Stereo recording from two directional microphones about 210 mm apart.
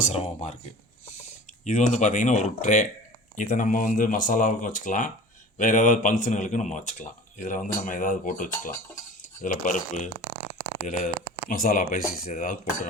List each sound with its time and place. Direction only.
0.0 s speech: 30° left (ahead or behind)
1.6 s speech: 35° left (ahead or behind)